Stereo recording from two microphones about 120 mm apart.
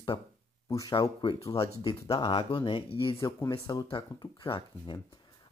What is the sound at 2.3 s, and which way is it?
Speech, 45° left (ahead or behind).